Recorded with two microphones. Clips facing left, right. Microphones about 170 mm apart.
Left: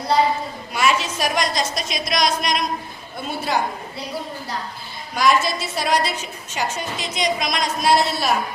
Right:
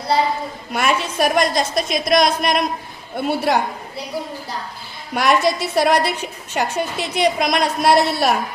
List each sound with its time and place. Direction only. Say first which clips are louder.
0.7 s a woman's voice: right 1 dB; 55° right (ahead or behind)
5.1 s a woman's voice: right 2 dB; 65° right (ahead or behind)